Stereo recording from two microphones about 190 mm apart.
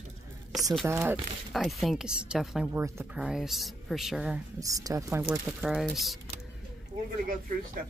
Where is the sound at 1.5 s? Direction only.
Centre (ahead or behind).